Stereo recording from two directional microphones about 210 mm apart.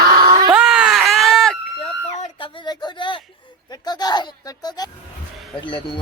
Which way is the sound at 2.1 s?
25° left (ahead or behind).